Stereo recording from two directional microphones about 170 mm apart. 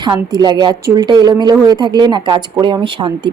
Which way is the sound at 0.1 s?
20° right (ahead or behind).